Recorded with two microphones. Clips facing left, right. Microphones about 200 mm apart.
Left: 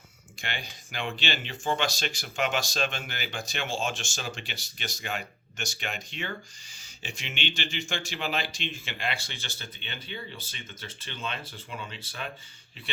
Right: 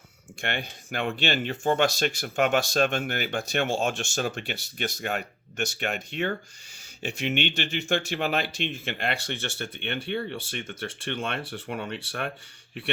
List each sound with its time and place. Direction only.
0.4 s speech: 60° right (ahead or behind)